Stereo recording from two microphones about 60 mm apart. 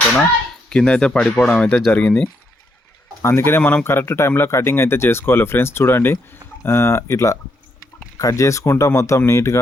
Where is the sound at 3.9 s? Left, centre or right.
Left.